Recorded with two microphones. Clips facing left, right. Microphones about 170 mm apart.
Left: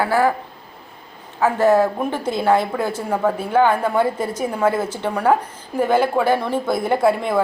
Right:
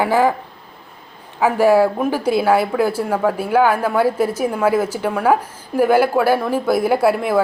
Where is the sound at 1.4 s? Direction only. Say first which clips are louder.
Right 2 dB; 10° right (ahead or behind).